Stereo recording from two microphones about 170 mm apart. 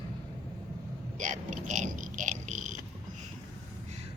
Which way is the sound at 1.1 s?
45° right (ahead or behind).